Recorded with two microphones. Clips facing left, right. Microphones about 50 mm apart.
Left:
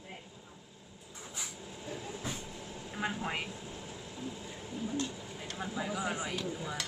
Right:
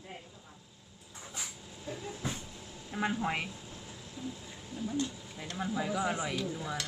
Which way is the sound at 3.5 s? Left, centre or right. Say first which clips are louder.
Left 3 dB; centre.